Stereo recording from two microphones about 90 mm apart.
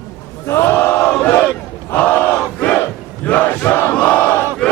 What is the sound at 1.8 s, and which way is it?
Battle cry, 20° left (ahead or behind).